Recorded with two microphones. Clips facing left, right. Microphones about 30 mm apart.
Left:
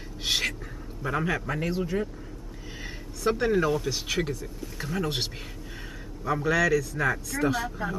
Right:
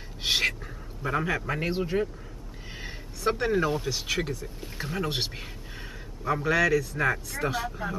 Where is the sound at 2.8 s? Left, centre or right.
Centre.